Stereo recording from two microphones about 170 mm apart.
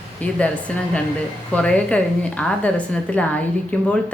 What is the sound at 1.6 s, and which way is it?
A woman's voice, 5° left (ahead or behind).